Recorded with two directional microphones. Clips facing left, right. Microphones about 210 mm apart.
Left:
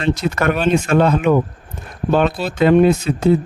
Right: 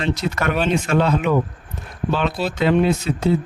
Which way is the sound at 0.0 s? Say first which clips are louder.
Left 4 dB; 50° left (ahead or behind).